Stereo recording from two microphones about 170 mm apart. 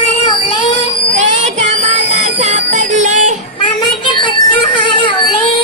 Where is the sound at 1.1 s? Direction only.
45° right (ahead or behind).